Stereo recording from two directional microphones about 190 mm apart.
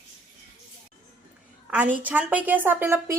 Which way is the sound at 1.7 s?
10° right (ahead or behind).